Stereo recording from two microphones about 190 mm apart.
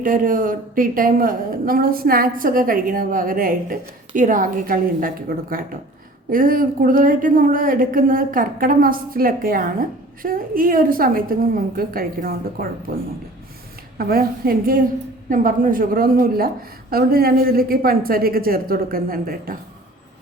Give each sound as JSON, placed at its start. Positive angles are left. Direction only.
{"t": 0.0, "sound": "a woman's voice", "side_deg": -45}
{"t": 14.0, "sound": "a woman's voice", "side_deg": -50}